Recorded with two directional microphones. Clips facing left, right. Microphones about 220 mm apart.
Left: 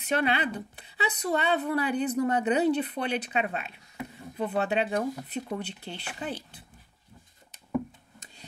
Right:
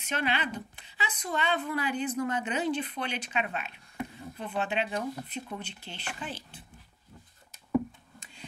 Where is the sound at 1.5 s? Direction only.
35° left (ahead or behind).